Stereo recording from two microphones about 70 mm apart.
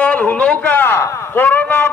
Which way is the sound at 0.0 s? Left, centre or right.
Left.